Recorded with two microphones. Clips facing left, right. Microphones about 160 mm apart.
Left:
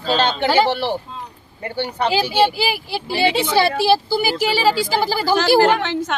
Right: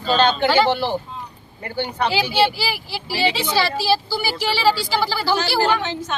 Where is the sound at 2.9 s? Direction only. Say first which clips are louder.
Left 2 dB; 55° left (ahead or behind).